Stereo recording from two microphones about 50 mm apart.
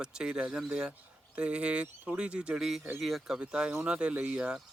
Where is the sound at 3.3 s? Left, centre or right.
Centre.